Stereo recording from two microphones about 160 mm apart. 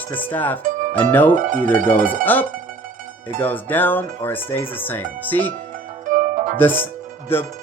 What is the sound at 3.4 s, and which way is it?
Speech, 10° left (ahead or behind).